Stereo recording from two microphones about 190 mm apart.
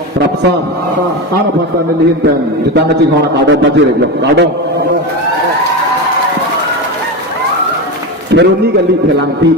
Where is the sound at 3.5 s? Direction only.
70° right (ahead or behind).